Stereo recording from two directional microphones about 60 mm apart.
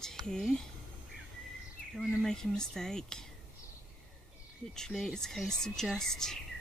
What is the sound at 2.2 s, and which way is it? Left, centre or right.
Speech, centre.